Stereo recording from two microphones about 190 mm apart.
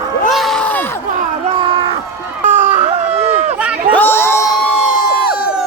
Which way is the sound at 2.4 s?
40° right (ahead or behind).